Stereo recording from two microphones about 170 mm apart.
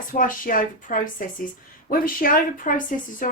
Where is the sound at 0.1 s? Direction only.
55° left (ahead or behind).